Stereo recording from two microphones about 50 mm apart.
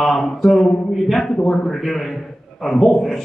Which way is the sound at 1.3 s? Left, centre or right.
Centre.